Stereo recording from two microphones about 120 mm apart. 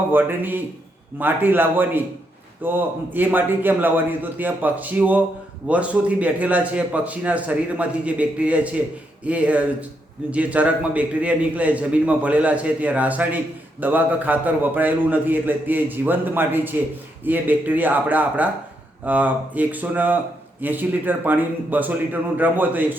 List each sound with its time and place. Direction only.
0.1 s a man's voice: 15° right (ahead or behind)